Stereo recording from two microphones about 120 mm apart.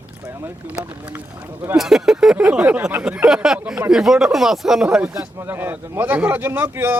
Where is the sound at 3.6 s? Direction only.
15° right (ahead or behind).